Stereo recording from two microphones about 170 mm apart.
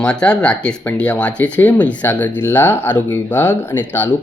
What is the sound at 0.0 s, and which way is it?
Speech, 5° left (ahead or behind).